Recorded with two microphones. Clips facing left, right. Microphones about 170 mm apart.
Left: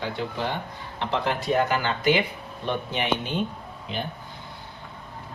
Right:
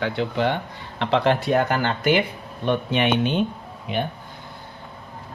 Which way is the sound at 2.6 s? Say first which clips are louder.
Right 6 dB; 65° right (ahead or behind).